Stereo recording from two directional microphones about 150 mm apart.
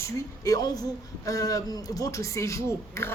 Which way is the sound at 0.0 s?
25° left (ahead or behind).